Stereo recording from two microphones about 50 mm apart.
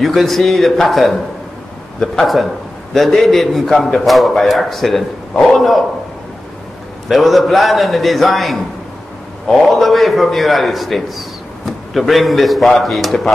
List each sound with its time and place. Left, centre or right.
0.0 s a man's voice: centre
7.1 s a man's voice: centre